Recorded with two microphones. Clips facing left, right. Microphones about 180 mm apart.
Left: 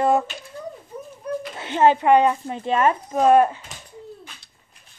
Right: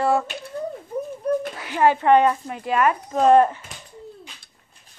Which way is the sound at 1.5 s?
25° left (ahead or behind).